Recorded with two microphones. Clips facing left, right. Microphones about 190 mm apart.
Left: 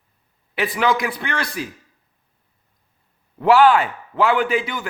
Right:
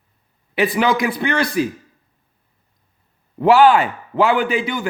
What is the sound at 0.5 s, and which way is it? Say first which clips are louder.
A man's voice: right 3 dB; centre (ahead or behind).